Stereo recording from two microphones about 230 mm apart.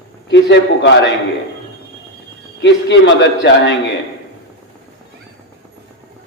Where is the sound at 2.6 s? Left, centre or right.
Left.